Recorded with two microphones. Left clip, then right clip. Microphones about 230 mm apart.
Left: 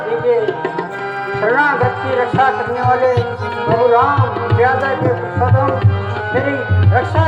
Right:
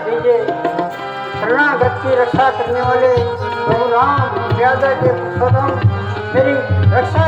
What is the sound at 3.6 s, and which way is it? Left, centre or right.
Tabla, left.